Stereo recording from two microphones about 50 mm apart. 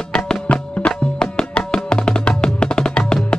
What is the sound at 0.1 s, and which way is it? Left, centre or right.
Music, left.